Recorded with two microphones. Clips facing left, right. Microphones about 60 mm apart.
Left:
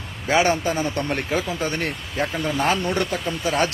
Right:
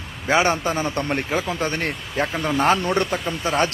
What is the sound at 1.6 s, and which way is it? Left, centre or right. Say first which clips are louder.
A man's voice: right 1 dB; right.